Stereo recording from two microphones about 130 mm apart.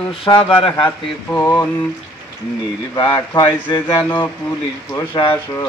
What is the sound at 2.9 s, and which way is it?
Speech, 30° left (ahead or behind).